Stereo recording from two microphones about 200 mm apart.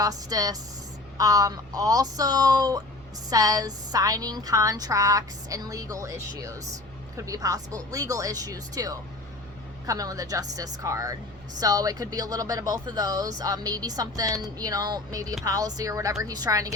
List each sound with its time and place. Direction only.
0.0 s a woman's voice: 20° right (ahead or behind)